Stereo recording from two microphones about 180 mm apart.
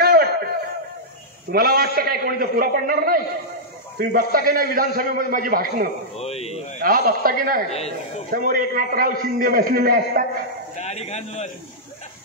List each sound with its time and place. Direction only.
0.0 s a sound: 60° right (ahead or behind)
1.5 s a man's voice: 55° right (ahead or behind)
6.1 s speech: 35° left (ahead or behind)
6.8 s a man's voice: 55° right (ahead or behind)
10.8 s a man's voice: 40° left (ahead or behind)